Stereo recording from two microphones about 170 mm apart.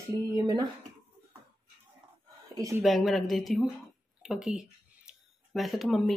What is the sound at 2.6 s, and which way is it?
Speech, 20° right (ahead or behind).